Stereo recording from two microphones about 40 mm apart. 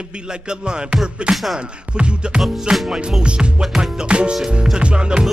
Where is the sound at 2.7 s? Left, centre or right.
Centre.